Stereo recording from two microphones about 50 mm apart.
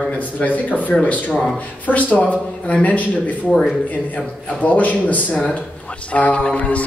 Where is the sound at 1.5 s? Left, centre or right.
Left.